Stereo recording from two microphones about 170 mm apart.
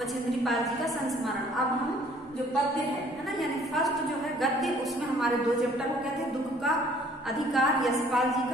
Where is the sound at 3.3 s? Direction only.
Centre (ahead or behind).